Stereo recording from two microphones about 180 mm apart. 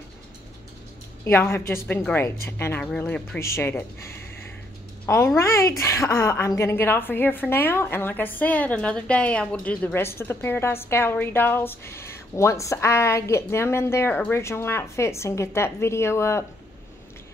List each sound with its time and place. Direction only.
1.2 s a woman's voice: 15° left (ahead or behind)